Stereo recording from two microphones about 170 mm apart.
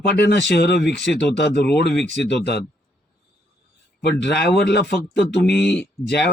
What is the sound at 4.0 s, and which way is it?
Speech, 75° left (ahead or behind).